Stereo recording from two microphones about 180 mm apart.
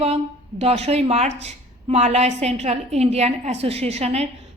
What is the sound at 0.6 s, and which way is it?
A woman's voice, 35° right (ahead or behind).